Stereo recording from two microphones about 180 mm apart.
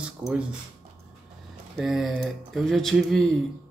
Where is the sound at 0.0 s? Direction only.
5° right (ahead or behind).